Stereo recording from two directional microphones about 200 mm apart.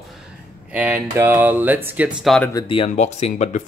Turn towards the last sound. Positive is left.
turn(degrees=35)  # may be behind; listen again after turning